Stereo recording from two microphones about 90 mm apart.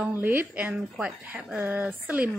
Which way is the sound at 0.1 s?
20° right (ahead or behind).